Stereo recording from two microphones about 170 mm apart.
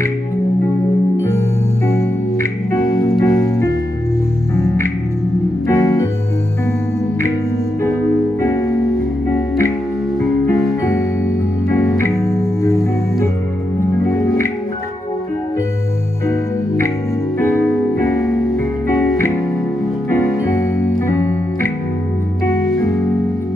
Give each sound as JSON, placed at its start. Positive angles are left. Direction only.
{"t": 2.7, "sound": "music", "side_deg": 20}
{"t": 5.7, "sound": "music", "side_deg": 20}
{"t": 8.4, "sound": "music", "side_deg": 15}
{"t": 10.5, "sound": "music", "side_deg": 15}
{"t": 16.3, "sound": "music", "side_deg": 15}
{"t": 20.1, "sound": "music", "side_deg": 20}